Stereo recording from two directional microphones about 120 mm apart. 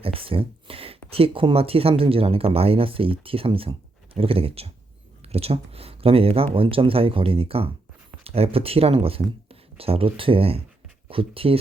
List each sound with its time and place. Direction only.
0.0 s speech: 50° right (ahead or behind)